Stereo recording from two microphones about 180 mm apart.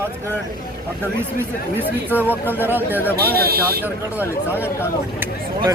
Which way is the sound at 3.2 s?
60° right (ahead or behind).